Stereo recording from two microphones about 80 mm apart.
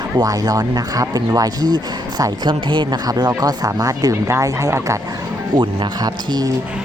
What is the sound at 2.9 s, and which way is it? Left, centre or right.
Speech, right.